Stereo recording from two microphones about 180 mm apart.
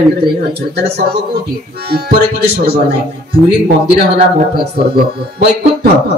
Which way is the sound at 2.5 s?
60° right (ahead or behind).